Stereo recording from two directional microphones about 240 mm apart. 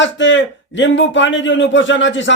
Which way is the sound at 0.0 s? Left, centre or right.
Left.